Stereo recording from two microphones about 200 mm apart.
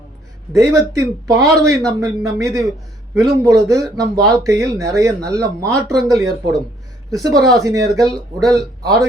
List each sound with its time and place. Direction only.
0.5 s speech: 15° right (ahead or behind)